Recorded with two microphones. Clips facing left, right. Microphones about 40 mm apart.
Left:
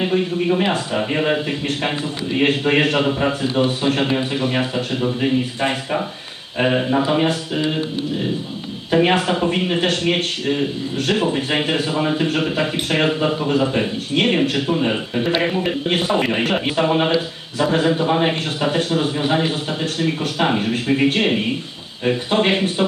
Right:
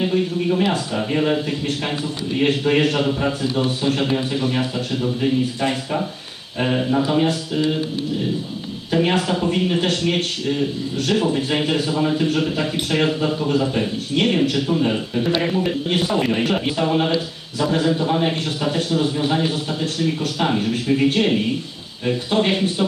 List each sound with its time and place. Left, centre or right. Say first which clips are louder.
0.0 s a man's voice: left 1 dB; left
6.6 s a man's voice: left 2 dB; left
8.9 s a man's voice: left 3 dB; left
15.9 s a man's voice: left 3 dB; left